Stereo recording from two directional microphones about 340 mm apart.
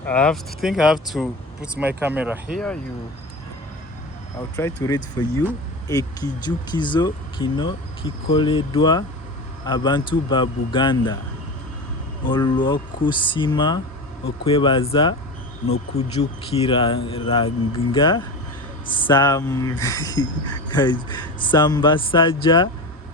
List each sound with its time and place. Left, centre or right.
0.0 s speech: centre
4.5 s speech: centre
12.2 s speech: centre